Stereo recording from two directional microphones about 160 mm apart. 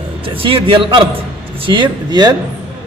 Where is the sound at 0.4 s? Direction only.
35° right (ahead or behind).